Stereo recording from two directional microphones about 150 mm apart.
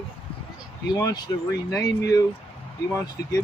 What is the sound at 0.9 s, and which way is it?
Speech, 20° left (ahead or behind).